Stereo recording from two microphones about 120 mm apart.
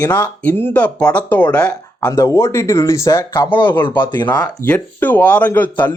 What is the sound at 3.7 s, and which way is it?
Speech, 40° left (ahead or behind).